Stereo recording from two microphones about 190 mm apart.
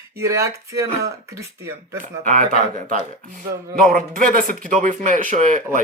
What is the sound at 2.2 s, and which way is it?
Speech, 40° right (ahead or behind).